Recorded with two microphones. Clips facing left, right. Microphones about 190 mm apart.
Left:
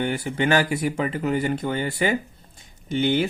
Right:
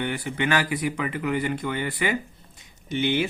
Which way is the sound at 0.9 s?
30° left (ahead or behind).